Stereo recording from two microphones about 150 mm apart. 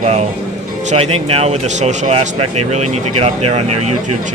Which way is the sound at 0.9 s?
40° right (ahead or behind).